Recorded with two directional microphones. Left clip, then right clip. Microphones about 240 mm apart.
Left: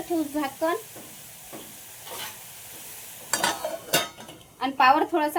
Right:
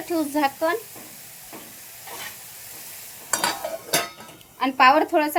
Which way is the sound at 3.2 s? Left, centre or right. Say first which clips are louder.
Right 1 dB; centre.